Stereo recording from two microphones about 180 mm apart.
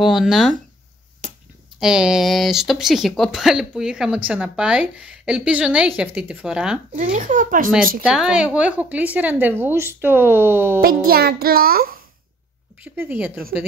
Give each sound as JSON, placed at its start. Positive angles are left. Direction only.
{"t": 0.0, "sound": "a woman's voice", "side_deg": 0}
{"t": 1.2, "sound": "finger snapping", "side_deg": -45}
{"t": 1.8, "sound": "a woman's voice", "side_deg": -5}
{"t": 7.0, "sound": "speech", "side_deg": -45}
{"t": 8.0, "sound": "a woman's voice", "side_deg": -5}
{"t": 10.8, "sound": "a child's voice", "side_deg": -55}
{"t": 12.8, "sound": "a woman's voice", "side_deg": -10}